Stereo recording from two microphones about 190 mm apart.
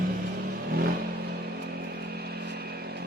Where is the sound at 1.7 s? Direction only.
55° right (ahead or behind).